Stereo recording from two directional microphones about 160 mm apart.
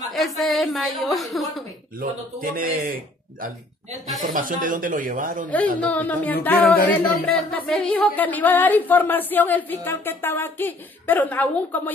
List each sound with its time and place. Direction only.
0.1 s a woman's voice: centre (ahead or behind)
2.0 s speech: 60° right (ahead or behind)
5.9 s speech: 10° left (ahead or behind)